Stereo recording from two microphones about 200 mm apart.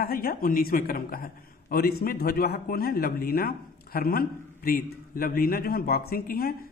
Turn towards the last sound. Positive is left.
turn(degrees=50)  # may be behind; listen again after turning